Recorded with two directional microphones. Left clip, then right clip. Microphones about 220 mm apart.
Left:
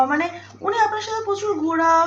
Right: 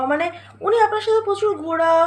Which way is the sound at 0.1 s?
45° right (ahead or behind).